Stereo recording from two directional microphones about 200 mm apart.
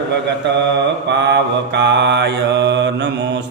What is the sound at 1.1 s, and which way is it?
Mantra, 60° right (ahead or behind).